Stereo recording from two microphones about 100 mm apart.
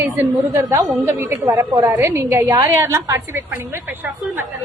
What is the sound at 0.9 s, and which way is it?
A woman's voice, 25° right (ahead or behind).